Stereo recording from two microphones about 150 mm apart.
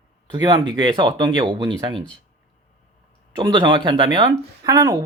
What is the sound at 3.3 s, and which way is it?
Speech, 30° right (ahead or behind).